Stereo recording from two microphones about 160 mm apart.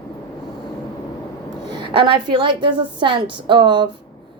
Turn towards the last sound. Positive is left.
turn(degrees=-30)  # may be behind; listen again after turning